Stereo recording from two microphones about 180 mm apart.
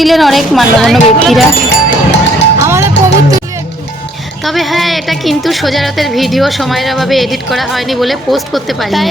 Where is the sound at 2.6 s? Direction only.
15° right (ahead or behind).